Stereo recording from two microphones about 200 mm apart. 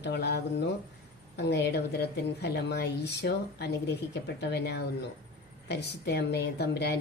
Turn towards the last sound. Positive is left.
turn(degrees=55)  # may be behind; listen again after turning